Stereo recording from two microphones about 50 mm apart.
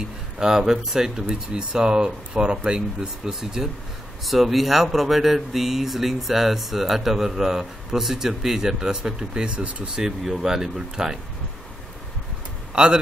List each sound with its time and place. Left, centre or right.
0.0 s speech: centre
10.0 s speech: centre
12.8 s speech: centre